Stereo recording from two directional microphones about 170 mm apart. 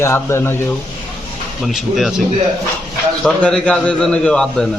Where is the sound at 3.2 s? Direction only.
5° left (ahead or behind).